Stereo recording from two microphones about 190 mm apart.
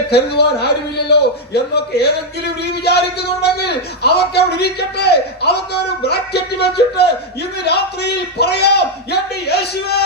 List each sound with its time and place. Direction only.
0.1 s a man's voice: 60° left (ahead or behind)